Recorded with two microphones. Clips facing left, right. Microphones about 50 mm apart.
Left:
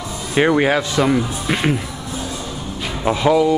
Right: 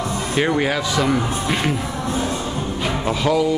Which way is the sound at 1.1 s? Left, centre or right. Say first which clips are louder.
Left 1 dB; centre.